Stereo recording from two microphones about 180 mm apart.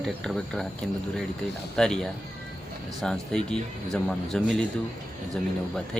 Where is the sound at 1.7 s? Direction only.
5° left (ahead or behind).